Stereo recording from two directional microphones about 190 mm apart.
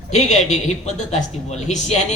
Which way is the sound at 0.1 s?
35° left (ahead or behind).